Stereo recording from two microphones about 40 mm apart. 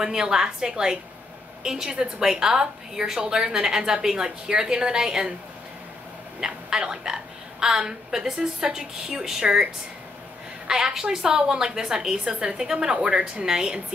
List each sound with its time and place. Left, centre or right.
0.0 s a woman's voice: centre
6.4 s a woman's voice: centre
10.7 s a woman's voice: centre